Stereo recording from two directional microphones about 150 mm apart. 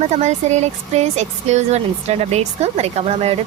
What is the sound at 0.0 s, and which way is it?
Speech, 50° right (ahead or behind).